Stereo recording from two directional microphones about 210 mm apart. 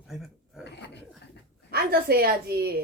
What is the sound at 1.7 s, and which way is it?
Speech, 45° right (ahead or behind).